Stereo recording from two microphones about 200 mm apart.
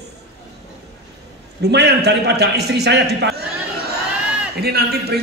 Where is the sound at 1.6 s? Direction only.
55° right (ahead or behind).